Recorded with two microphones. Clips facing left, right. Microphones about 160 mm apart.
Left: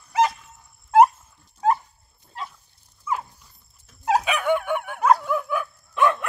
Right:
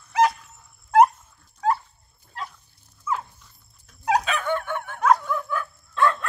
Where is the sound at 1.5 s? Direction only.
20° left (ahead or behind).